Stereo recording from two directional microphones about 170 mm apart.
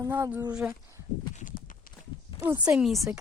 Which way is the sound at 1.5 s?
55° left (ahead or behind).